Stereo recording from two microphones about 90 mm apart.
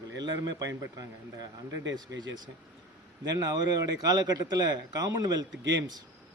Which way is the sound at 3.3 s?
45° right (ahead or behind).